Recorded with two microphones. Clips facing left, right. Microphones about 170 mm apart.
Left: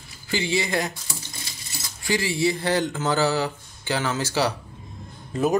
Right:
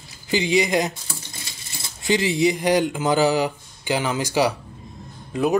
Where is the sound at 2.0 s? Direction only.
20° right (ahead or behind).